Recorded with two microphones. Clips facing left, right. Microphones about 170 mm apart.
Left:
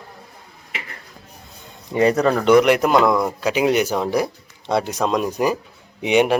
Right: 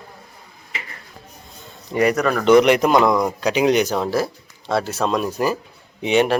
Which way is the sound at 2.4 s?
5° left (ahead or behind).